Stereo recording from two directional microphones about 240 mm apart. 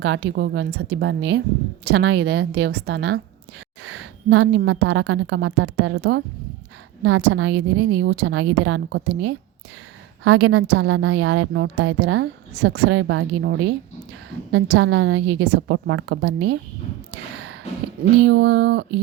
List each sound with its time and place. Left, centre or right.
0.0 s a woman's voice: right
8.0 s a woman's voice: right
8.4 s a woman's voice: right
10.3 s a woman's voice: right
18.3 s a woman's voice: right